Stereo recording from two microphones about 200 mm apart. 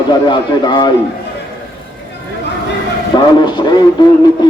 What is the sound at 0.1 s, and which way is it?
Speech, 20° left (ahead or behind).